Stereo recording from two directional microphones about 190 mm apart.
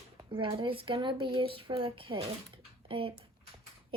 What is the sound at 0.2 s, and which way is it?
Speech, 25° right (ahead or behind).